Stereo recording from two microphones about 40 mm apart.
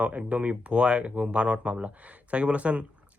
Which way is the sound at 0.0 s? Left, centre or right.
Right.